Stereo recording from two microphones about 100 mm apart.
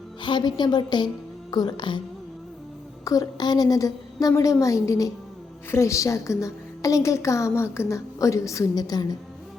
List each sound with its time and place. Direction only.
0.2 s a woman's voice: 50° left (ahead or behind)
3.0 s a woman's voice: 35° left (ahead or behind)